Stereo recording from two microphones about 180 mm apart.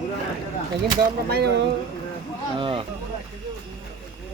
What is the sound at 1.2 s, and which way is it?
Speech, 60° right (ahead or behind).